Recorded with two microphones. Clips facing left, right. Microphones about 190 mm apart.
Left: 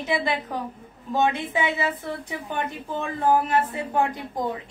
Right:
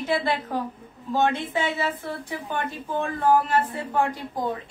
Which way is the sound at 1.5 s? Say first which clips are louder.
Left 1 dB; 15° left (ahead or behind).